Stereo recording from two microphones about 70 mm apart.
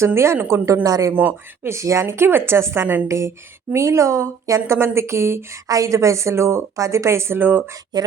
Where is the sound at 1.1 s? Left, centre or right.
Right.